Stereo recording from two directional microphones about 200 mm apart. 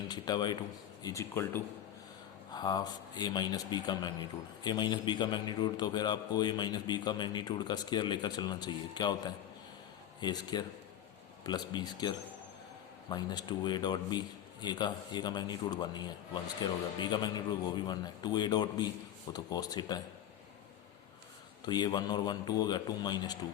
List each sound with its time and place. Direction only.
0.1 s a man's voice: 20° left (ahead or behind)
21.7 s a man's voice: 20° left (ahead or behind)